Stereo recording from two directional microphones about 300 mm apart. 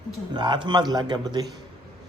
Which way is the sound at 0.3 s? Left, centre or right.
Centre.